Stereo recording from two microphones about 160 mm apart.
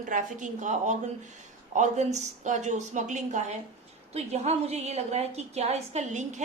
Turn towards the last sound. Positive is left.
turn(degrees=-45)  # may be behind; listen again after turning